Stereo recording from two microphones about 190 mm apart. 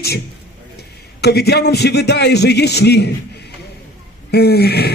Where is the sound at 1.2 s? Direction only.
60° left (ahead or behind).